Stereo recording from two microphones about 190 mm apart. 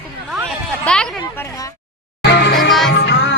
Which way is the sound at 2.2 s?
60° left (ahead or behind).